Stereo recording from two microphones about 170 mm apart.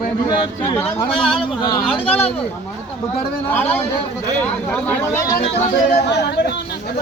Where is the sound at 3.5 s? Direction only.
10° left (ahead or behind).